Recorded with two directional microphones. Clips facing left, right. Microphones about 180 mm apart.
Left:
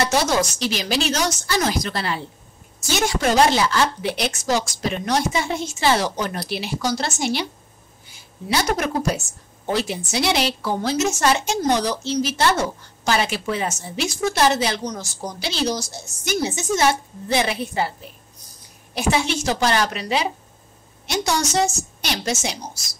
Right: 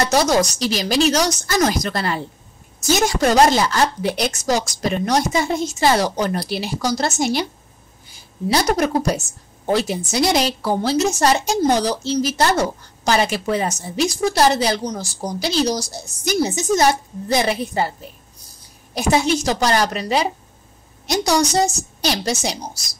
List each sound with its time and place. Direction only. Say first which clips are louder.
0.0 s a woman's voice: right 3 dB; 40° right (ahead or behind)
8.5 s a woman's voice: right 4 dB; 35° right (ahead or behind)
18.9 s a woman's voice: right 4 dB; 40° right (ahead or behind)